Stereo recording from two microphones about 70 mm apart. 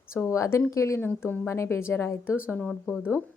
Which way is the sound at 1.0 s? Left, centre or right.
Left.